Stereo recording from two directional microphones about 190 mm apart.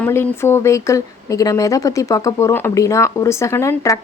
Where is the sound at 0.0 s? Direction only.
10° left (ahead or behind).